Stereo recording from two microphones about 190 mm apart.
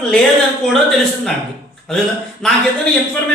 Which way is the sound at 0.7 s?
Centre (ahead or behind).